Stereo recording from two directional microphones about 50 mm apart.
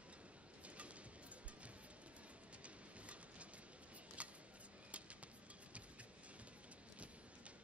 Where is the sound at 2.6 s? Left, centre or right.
Right.